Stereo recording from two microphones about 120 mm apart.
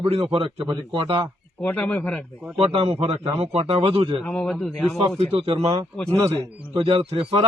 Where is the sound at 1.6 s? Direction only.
10° left (ahead or behind).